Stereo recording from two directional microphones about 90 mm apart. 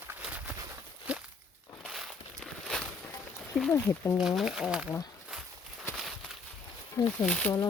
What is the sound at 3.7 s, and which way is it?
Speech, 35° left (ahead or behind).